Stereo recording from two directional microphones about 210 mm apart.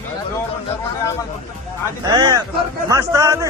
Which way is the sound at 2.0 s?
15° right (ahead or behind).